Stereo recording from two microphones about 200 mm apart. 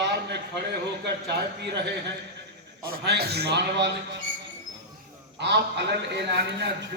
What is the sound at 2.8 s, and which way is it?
A man's voice, 50° right (ahead or behind).